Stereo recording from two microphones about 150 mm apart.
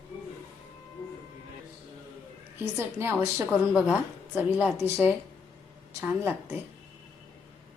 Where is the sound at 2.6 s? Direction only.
15° right (ahead or behind).